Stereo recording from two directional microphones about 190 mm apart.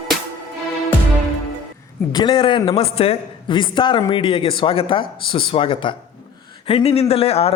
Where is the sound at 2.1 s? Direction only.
25° left (ahead or behind).